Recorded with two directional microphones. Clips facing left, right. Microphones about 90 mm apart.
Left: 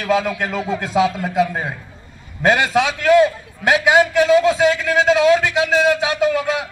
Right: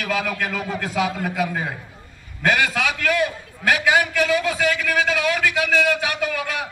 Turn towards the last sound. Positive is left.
turn(degrees=20)  # may be behind; listen again after turning